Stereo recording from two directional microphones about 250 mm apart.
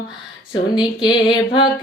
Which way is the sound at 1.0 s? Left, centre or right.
Centre.